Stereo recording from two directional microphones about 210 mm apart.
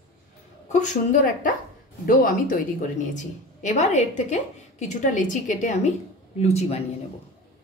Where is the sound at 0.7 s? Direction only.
35° left (ahead or behind).